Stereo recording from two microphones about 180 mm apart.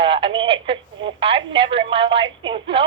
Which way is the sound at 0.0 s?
30° right (ahead or behind).